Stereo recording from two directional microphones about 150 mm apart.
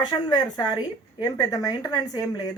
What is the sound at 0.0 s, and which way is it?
Speech, 25° left (ahead or behind).